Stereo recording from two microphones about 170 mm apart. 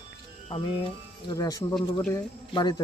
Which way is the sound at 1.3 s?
20° left (ahead or behind).